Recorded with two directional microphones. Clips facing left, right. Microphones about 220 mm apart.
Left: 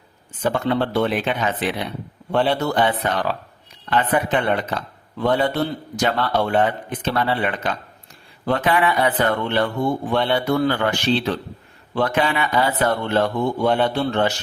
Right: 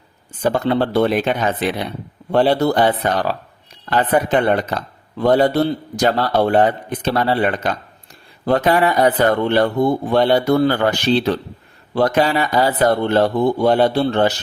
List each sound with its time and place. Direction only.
0.4 s a man's voice: 35° right (ahead or behind)